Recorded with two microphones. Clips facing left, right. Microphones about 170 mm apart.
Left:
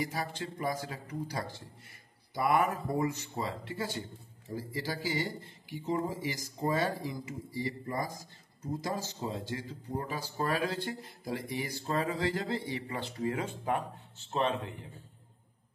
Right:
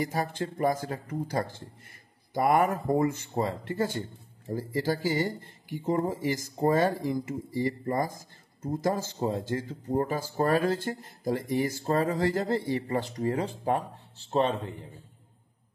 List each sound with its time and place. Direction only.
0.0 s speech: 50° right (ahead or behind)